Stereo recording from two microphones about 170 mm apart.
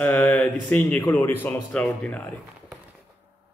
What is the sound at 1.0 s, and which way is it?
Speech, 15° left (ahead or behind).